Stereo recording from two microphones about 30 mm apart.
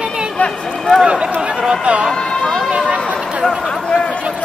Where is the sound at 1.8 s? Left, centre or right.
Right.